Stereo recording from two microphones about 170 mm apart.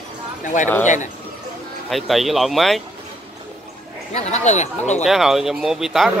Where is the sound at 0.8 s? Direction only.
45° left (ahead or behind).